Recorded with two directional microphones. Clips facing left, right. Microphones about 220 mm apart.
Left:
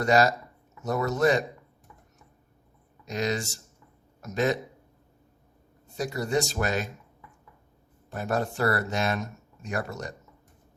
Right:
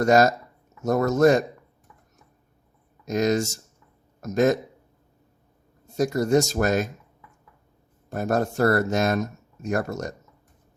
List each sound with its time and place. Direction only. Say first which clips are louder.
0.0 s speech: right 4 dB; 45° right (ahead or behind)
3.1 s a man's voice: right 7 dB; 45° right (ahead or behind)
6.0 s speech: right 7 dB; 45° right (ahead or behind)
8.1 s speech: right 5 dB; 45° right (ahead or behind)